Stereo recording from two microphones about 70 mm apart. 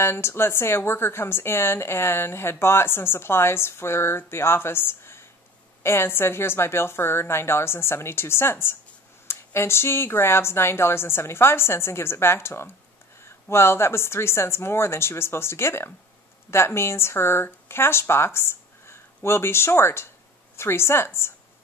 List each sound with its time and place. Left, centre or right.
0.0 s a woman's voice: left